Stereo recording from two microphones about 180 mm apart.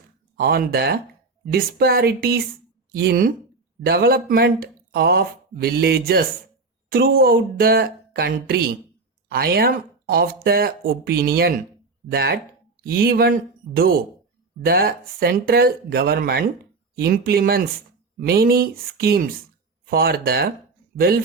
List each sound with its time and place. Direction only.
0.3 s speech: 55° right (ahead or behind)